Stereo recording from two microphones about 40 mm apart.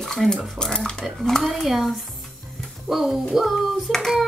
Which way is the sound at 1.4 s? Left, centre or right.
Centre.